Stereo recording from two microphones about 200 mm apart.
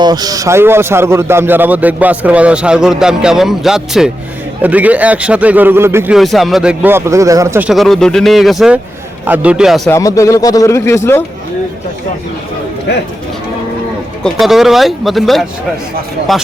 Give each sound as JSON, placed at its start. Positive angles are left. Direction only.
{"t": 0.0, "sound": "a man's voice", "side_deg": -20}
{"t": 6.1, "sound": "a man's voice", "side_deg": 0}
{"t": 7.7, "sound": "speech", "side_deg": 0}
{"t": 9.9, "sound": "speech", "side_deg": 15}
{"t": 14.3, "sound": "speech", "side_deg": 0}